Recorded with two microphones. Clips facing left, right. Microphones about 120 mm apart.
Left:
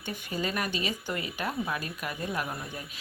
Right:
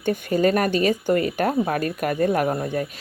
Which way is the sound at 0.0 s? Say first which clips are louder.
Right 14 dB; 55° right (ahead or behind).